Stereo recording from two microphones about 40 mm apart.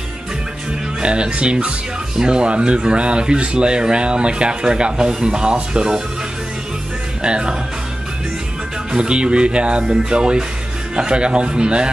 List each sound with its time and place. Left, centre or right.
1.0 s speech: right
7.2 s speech: right
8.9 s speech: right